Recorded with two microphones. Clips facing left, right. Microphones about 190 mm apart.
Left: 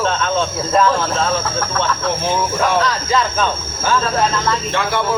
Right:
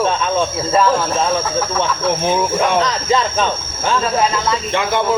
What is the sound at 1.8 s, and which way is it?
Speech, 15° right (ahead or behind).